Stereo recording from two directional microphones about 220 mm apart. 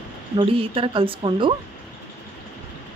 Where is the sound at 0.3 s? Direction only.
25° right (ahead or behind).